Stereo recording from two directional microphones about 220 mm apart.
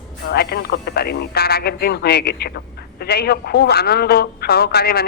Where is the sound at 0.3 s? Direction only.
45° left (ahead or behind).